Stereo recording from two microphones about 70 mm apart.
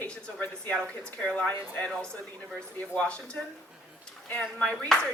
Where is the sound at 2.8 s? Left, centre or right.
Centre.